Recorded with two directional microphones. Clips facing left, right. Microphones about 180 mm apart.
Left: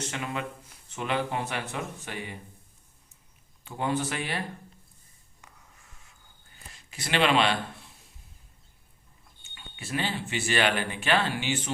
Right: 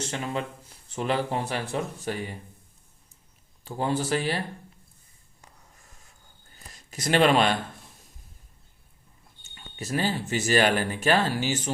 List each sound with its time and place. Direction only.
0.0 s speech: 35° right (ahead or behind)
3.6 s speech: 35° right (ahead or behind)
5.4 s a sound: 40° right (ahead or behind)
9.4 s speech: 40° right (ahead or behind)